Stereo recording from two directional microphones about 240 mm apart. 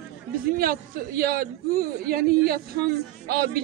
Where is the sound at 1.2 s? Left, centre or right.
Right.